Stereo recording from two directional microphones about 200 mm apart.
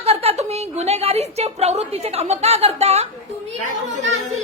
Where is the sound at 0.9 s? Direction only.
30° right (ahead or behind).